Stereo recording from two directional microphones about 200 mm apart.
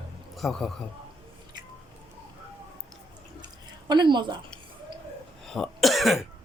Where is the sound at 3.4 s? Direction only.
20° right (ahead or behind).